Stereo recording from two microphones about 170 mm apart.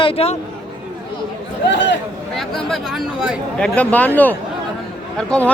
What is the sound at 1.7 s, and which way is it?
Speech, 90° left.